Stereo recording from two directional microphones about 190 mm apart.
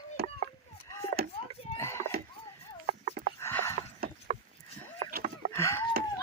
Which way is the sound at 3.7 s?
40° right (ahead or behind).